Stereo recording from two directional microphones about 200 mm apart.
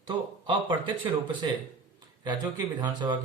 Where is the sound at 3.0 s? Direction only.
15° right (ahead or behind).